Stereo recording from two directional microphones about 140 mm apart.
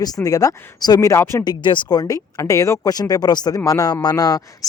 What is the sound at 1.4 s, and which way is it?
A man's voice, 35° left (ahead or behind).